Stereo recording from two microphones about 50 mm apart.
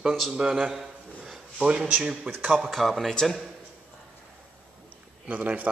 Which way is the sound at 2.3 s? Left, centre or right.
Right.